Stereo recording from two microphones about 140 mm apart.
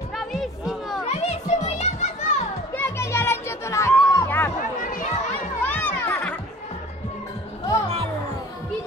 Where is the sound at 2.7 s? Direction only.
15° left (ahead or behind).